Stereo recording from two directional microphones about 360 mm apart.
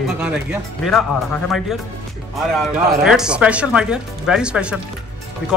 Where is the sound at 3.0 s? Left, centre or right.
Centre.